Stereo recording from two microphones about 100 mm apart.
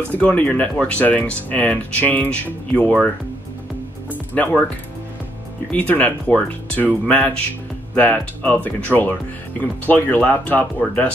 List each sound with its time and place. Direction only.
0.1 s speech: 15° left (ahead or behind)
4.1 s music: 15° left (ahead or behind)
5.7 s speech: 15° left (ahead or behind)